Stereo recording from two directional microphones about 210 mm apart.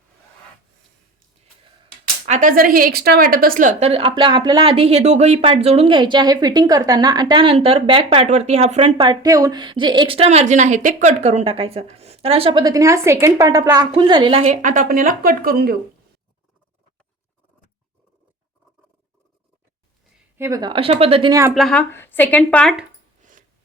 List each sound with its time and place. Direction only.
2.2 s a woman's voice: 35° right (ahead or behind)
20.4 s a woman's voice: 20° right (ahead or behind)
21.5 s speech: centre (ahead or behind)
23.2 s a sound: 35° right (ahead or behind)